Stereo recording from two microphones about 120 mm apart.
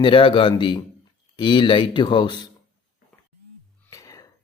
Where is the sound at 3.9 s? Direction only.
30° left (ahead or behind).